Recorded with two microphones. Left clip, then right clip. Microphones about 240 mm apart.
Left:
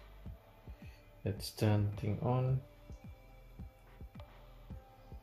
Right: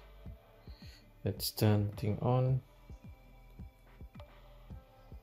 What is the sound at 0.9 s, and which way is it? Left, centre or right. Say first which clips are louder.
Music: right 2 dB; right.